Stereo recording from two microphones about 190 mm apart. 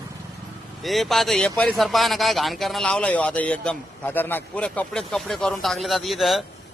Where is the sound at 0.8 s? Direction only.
Centre (ahead or behind).